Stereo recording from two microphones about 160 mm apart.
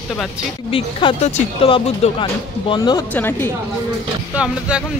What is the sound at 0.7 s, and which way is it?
Speech, 35° left (ahead or behind).